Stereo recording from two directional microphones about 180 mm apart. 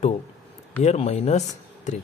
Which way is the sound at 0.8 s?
35° left (ahead or behind).